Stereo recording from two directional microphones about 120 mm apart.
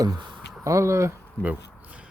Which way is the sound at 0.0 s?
35° right (ahead or behind).